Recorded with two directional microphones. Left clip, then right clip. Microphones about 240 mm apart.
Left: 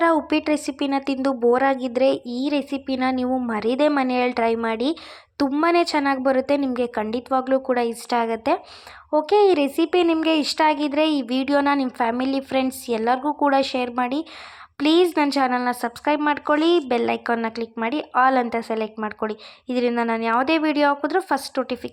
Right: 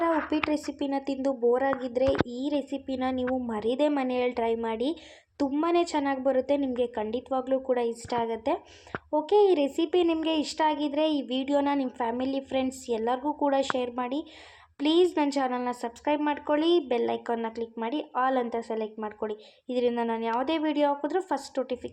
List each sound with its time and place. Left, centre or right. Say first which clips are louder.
0.0 s a woman's voice: left 7 dB; centre